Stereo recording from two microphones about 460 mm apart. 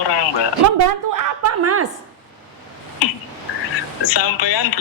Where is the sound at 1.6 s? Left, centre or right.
Right.